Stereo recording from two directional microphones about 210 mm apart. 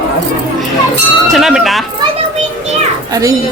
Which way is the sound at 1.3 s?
Centre (ahead or behind).